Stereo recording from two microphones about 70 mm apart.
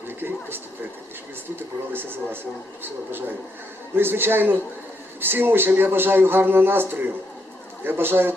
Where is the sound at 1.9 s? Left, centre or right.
Right.